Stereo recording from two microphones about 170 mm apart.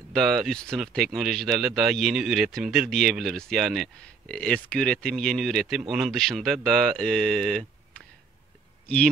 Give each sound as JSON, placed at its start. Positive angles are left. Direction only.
{"t": 0.1, "sound": "speech", "side_deg": 0}